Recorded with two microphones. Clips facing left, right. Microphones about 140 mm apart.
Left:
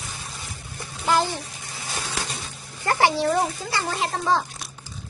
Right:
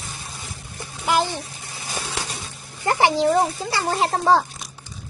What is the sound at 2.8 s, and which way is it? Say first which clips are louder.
Speech: right 2 dB; 20° right (ahead or behind).